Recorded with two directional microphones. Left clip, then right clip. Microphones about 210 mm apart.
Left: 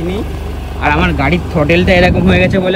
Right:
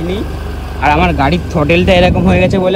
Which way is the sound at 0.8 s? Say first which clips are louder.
Right 2 dB; 5° left (ahead or behind).